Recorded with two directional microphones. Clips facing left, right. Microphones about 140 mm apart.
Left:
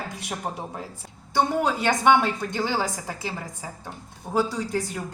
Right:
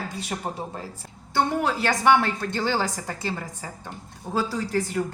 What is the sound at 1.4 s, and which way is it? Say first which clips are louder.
A woman's voice: left 1 dB; 20° left (ahead or behind).